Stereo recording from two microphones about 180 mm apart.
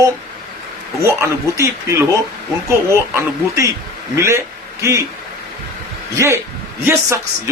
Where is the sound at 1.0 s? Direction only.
15° right (ahead or behind).